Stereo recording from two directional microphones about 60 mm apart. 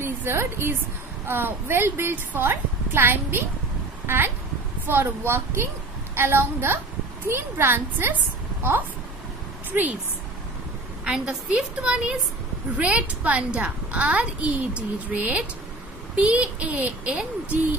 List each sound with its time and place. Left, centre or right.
0.0 s a woman's voice: right
4.0 s a sound: right
4.8 s a woman's voice: right
9.7 s a woman's voice: right
11.1 s a woman's voice: centre